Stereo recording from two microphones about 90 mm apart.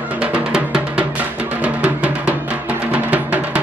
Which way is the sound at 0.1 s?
15° right (ahead or behind).